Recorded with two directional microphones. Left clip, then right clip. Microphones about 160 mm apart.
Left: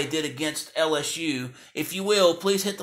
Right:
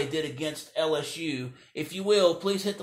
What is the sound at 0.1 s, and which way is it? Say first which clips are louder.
Speech: left 3 dB; 20° left (ahead or behind).